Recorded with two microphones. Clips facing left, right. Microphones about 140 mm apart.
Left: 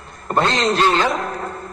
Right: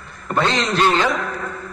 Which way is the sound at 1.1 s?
35° left (ahead or behind).